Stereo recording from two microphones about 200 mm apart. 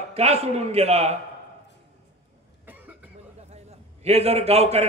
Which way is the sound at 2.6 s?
10° right (ahead or behind).